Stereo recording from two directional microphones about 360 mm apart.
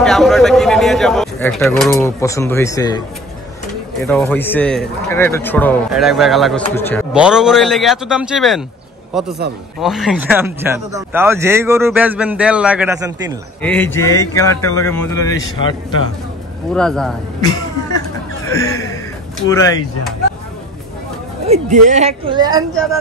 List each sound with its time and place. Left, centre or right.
0.0 s a man's voice: centre
4.0 s a man's voice: centre
9.8 s a man's voice: centre
13.6 s a man's voice: centre
16.7 s a man's voice: centre
19.5 s a man's voice: centre
21.5 s a woman's voice: centre